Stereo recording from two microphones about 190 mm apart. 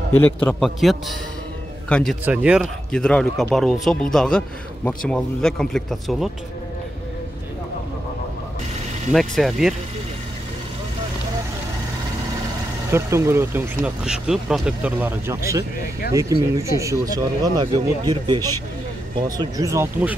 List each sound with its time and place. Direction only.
0.1 s speech: 10° left (ahead or behind)
2.2 s speech: 5° right (ahead or behind)
9.1 s speech: centre (ahead or behind)
12.9 s speech: 15° right (ahead or behind)